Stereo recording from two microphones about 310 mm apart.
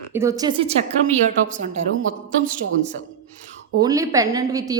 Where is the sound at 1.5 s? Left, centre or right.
Right.